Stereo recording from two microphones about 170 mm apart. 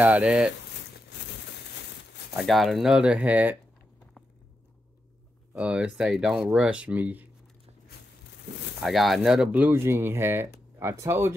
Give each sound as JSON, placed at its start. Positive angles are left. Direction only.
{"t": 0.0, "sound": "speech", "side_deg": -5}
{"t": 0.9, "sound": "a sound", "side_deg": 85}
{"t": 2.3, "sound": "speech", "side_deg": 0}
{"t": 5.5, "sound": "speech", "side_deg": -5}
{"t": 8.8, "sound": "speech", "side_deg": 0}